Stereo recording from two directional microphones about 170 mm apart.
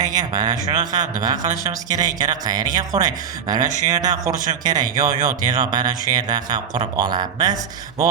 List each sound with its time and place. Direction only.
0.0 s a man's voice: 20° right (ahead or behind)